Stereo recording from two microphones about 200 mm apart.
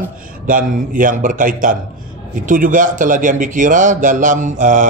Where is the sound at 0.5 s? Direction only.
40° right (ahead or behind).